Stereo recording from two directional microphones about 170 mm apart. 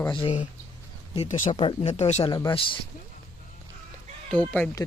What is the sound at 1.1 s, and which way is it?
Speech, 40° left (ahead or behind).